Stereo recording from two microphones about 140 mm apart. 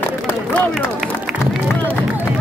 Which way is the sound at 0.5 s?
10° left (ahead or behind).